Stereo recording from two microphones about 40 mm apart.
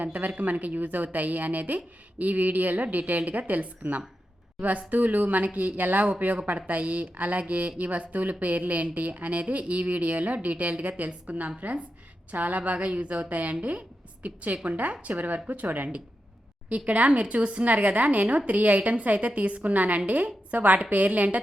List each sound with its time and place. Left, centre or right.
0.0 s a woman's voice: right